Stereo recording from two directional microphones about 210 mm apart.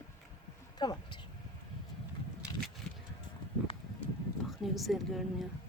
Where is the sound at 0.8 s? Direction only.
20° left (ahead or behind).